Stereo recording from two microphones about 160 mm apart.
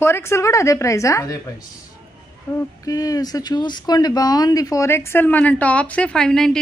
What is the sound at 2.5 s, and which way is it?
A woman's voice, 20° left (ahead or behind).